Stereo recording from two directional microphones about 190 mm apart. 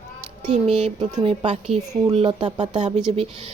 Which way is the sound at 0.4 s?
35° right (ahead or behind).